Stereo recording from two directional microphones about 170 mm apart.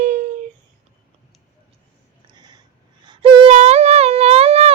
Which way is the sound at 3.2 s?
35° right (ahead or behind).